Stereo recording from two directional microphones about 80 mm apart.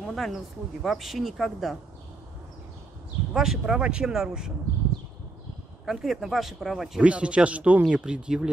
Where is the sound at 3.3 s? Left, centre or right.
Centre.